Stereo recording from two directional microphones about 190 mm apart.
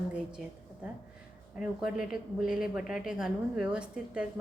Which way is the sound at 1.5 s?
5° right (ahead or behind).